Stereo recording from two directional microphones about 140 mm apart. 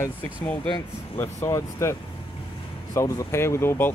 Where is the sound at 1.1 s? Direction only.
15° left (ahead or behind).